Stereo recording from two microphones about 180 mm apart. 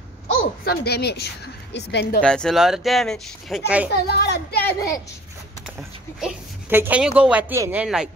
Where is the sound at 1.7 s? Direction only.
75° left (ahead or behind).